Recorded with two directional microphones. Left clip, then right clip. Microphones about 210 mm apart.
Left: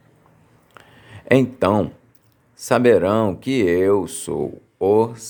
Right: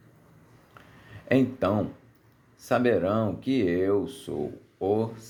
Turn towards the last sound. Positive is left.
turn(degrees=35)  # may be behind; listen again after turning